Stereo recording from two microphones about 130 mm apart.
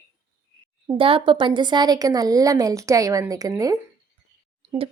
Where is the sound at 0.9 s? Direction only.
40° right (ahead or behind).